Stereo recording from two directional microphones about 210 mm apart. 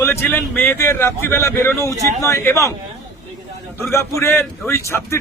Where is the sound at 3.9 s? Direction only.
15° left (ahead or behind).